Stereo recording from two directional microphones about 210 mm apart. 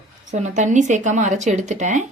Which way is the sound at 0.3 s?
35° right (ahead or behind).